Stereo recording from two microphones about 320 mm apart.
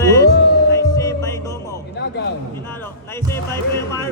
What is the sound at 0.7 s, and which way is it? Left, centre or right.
Music, centre.